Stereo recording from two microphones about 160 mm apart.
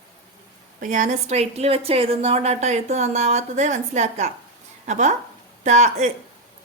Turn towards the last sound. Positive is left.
turn(degrees=-45)  # may be behind; listen again after turning